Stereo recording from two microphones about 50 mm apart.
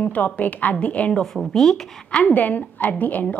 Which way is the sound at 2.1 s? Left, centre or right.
Left.